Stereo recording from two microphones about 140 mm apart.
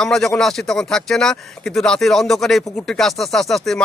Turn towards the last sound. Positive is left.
turn(degrees=0)  # may be behind; listen again after turning